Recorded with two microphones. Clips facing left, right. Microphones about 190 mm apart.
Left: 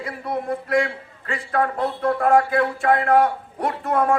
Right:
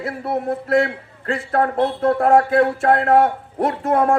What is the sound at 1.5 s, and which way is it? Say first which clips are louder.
A man's voice: right 3 dB; 40° right (ahead or behind).